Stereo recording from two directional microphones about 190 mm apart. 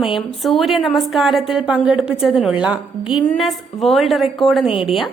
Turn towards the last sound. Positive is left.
turn(degrees=30)  # may be behind; listen again after turning